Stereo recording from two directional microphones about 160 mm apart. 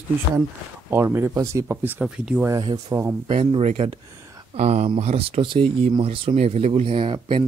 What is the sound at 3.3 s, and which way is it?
Speech, 35° right (ahead or behind).